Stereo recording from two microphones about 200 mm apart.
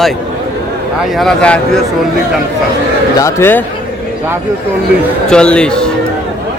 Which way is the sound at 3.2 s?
10° left (ahead or behind).